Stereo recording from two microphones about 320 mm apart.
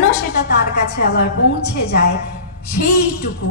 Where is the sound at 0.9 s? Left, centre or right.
Left.